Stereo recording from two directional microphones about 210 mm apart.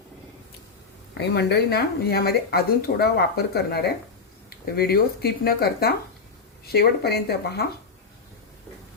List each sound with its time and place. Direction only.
1.2 s speech: 50° left (ahead or behind)